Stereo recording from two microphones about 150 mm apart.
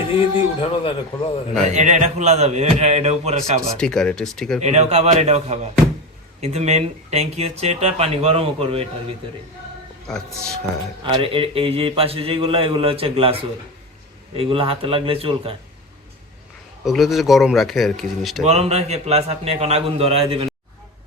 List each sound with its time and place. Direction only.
0.2 s a man's voice: 40° left (ahead or behind)
1.5 s speech: 55° right (ahead or behind)
3.8 s speech: 5° left (ahead or behind)
4.6 s speech: 45° right (ahead or behind)
10.1 s speech: 5° left (ahead or behind)
11.1 s a man's voice: 35° right (ahead or behind)
16.8 s speech: centre (ahead or behind)
18.4 s speech: 45° right (ahead or behind)